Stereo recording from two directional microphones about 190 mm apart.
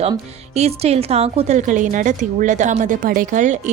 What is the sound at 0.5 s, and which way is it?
Speech, 35° right (ahead or behind).